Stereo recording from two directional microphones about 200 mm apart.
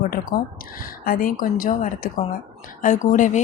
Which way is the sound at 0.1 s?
45° left (ahead or behind).